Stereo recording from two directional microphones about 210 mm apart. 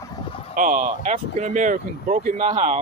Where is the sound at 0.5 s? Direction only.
40° right (ahead or behind).